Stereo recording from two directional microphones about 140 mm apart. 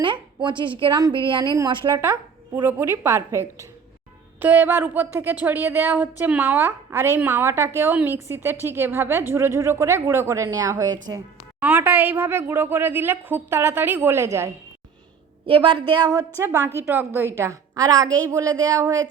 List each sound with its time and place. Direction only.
0.0 s a woman's voice: 35° right (ahead or behind)
2.6 s a woman's voice: 15° right (ahead or behind)
11.6 s a woman's voice: 10° right (ahead or behind)
15.4 s a woman's voice: 35° right (ahead or behind)
16.4 s a woman's voice: 15° right (ahead or behind)